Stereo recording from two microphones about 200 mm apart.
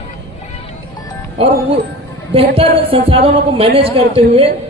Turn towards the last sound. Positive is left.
turn(degrees=-30)  # may be behind; listen again after turning